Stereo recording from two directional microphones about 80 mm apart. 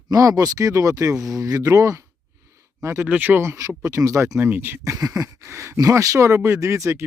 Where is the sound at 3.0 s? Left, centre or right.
Right.